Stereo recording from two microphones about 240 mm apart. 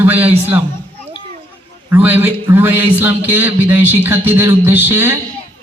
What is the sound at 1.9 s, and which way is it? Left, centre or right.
Speech, centre.